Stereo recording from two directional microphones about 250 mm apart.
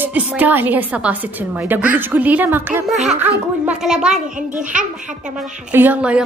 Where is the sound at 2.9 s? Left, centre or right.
Right.